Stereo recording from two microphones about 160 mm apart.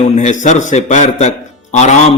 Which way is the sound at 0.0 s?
50° left (ahead or behind).